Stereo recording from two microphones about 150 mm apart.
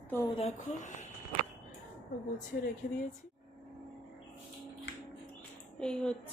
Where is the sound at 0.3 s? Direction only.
50° left (ahead or behind).